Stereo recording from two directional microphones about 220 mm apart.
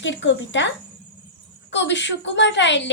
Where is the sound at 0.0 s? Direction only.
55° left (ahead or behind).